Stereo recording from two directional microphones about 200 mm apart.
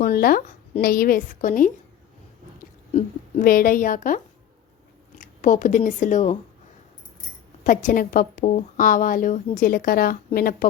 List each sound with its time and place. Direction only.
0.0 s a woman's voice: 50° left (ahead or behind)
2.9 s a woman's voice: 40° left (ahead or behind)
7.6 s a woman's voice: 40° left (ahead or behind)